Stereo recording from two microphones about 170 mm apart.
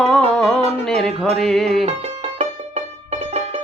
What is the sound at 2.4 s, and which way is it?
Music, 40° right (ahead or behind).